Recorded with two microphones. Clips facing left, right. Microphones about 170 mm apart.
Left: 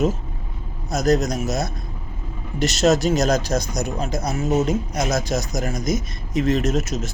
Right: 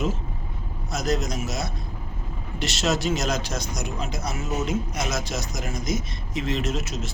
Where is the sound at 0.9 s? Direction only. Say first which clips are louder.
Left 7 dB; 40° left (ahead or behind).